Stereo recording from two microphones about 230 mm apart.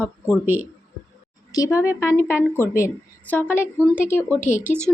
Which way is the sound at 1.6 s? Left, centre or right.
Centre.